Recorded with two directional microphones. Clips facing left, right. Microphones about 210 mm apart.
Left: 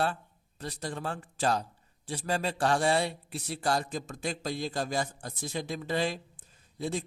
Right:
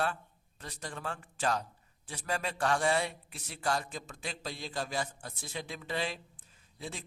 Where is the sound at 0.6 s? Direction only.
35° left (ahead or behind).